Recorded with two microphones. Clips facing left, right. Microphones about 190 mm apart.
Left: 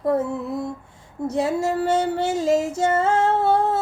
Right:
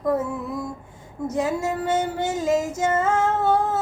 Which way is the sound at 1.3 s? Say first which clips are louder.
Left 2 dB; 30° left (ahead or behind).